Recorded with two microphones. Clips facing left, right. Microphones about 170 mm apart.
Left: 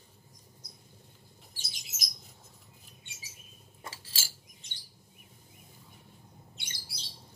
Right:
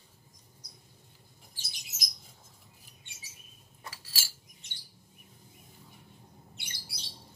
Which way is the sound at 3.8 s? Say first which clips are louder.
Left 1 dB; 25° left (ahead or behind).